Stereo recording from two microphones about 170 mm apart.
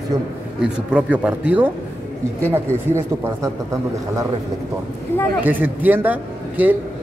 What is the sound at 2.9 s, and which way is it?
Speech, 15° right (ahead or behind).